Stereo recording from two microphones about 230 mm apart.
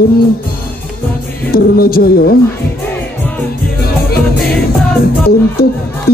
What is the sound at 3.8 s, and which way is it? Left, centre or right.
Music, left.